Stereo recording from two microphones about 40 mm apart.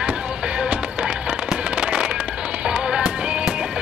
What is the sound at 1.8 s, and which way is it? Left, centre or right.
Fireworks, right.